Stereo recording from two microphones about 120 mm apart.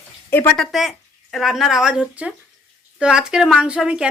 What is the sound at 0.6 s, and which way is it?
Speech, centre (ahead or behind).